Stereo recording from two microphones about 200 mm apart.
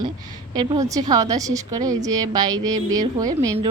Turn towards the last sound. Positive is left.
turn(degrees=-20)  # may be behind; listen again after turning